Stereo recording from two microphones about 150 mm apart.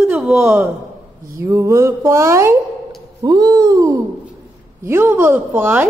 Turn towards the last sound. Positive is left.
turn(degrees=-15)  # may be behind; listen again after turning